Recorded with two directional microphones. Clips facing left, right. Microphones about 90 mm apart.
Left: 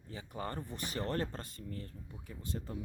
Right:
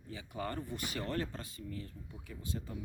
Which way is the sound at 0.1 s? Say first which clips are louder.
Right 1 dB; 35° left (ahead or behind).